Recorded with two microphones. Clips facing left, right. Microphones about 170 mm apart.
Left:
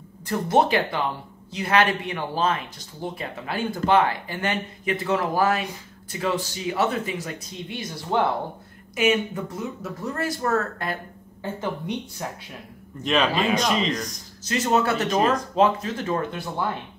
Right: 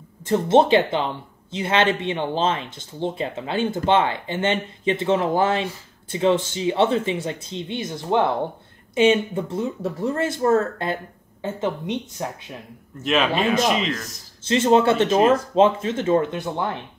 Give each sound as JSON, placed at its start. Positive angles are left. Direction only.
{"t": 0.2, "sound": "speech", "side_deg": -25}
{"t": 13.0, "sound": "speech", "side_deg": -5}
{"t": 14.4, "sound": "speech", "side_deg": -25}